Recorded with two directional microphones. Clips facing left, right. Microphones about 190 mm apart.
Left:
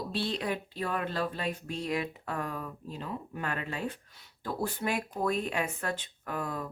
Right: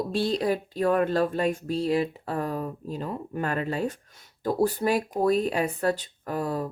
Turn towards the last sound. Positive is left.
turn(degrees=-35)  # may be behind; listen again after turning